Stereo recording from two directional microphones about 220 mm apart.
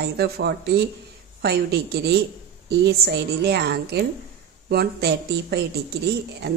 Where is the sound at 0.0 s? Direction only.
50° right (ahead or behind).